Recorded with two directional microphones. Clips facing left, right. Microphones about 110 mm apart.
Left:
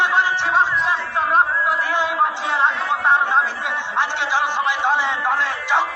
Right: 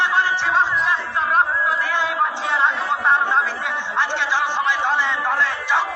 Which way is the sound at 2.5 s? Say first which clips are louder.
Left 1 dB; 15° left (ahead or behind).